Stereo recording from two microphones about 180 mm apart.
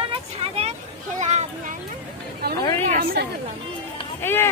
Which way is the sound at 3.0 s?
60° right (ahead or behind).